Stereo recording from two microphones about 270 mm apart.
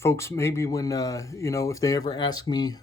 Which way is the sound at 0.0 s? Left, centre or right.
Centre.